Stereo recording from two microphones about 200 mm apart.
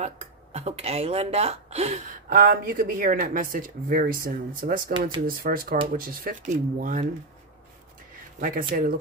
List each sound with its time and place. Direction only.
0.0 s a woman's voice: 35° right (ahead or behind)
8.4 s a woman's voice: 45° right (ahead or behind)